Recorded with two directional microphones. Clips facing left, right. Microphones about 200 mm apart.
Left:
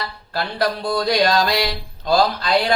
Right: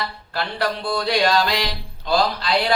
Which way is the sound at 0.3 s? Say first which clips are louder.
Left 2 dB; 40° left (ahead or behind).